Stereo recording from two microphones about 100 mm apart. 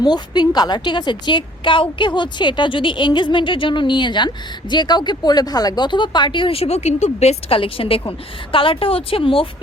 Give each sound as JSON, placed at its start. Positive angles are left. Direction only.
{"t": 0.0, "sound": "a woman's voice", "side_deg": 45}